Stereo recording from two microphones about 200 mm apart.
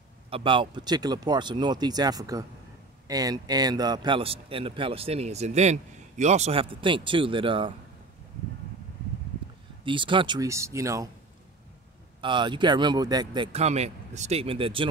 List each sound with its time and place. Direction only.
0.3 s a man's voice: 25° right (ahead or behind)
9.8 s speech: 25° right (ahead or behind)
12.2 s a man's voice: 25° right (ahead or behind)